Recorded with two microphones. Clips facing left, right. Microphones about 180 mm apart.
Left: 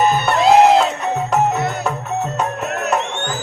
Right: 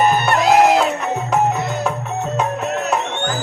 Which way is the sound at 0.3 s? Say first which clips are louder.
Left 3 dB; 25° left (ahead or behind).